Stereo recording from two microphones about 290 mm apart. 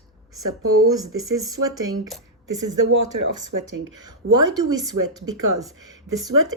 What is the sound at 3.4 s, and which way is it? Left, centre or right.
Speech, right.